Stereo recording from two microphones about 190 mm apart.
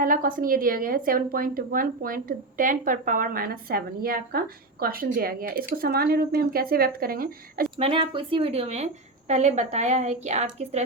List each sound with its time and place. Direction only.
0.0 s speech: 45° right (ahead or behind)
7.8 s a woman's voice: 30° right (ahead or behind)